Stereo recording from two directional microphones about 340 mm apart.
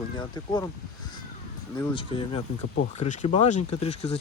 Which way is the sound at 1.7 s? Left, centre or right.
Centre.